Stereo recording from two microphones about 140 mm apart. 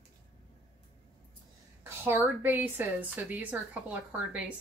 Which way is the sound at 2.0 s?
15° right (ahead or behind).